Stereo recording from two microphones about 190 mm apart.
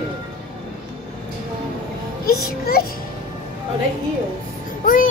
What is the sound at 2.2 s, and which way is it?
Speech, 50° left (ahead or behind).